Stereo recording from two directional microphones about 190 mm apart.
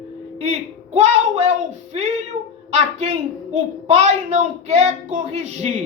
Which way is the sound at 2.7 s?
35° right (ahead or behind).